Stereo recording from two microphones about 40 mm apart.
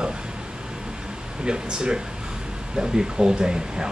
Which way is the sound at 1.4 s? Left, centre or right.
Right.